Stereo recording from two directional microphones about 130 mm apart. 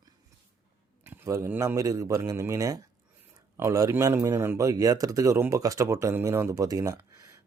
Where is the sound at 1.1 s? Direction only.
20° right (ahead or behind).